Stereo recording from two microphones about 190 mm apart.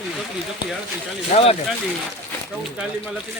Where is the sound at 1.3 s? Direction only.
30° left (ahead or behind).